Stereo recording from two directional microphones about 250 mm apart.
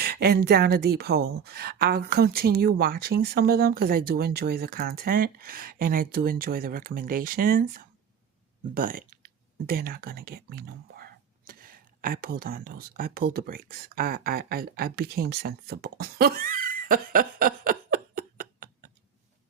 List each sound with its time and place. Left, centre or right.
0.0 s a woman's voice: right